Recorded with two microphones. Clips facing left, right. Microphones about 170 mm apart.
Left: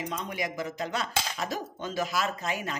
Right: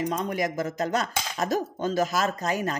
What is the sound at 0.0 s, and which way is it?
Speech, 45° right (ahead or behind).